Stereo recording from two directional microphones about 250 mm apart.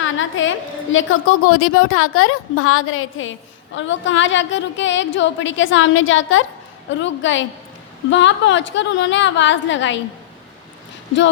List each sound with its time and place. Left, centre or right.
0.0 s a woman's voice: left